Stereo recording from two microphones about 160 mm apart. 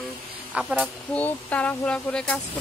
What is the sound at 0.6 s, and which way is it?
Speech, 5° right (ahead or behind).